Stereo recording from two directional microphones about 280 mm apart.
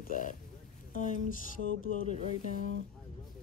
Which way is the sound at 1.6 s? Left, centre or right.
Left.